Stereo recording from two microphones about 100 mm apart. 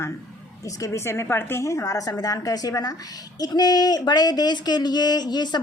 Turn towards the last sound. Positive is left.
turn(degrees=45)  # may be behind; listen again after turning